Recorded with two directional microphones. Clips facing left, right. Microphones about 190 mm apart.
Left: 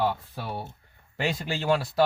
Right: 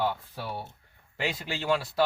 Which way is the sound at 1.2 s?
45° left (ahead or behind).